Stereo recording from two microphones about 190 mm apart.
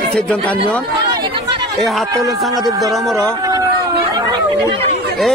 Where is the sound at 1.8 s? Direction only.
Centre (ahead or behind).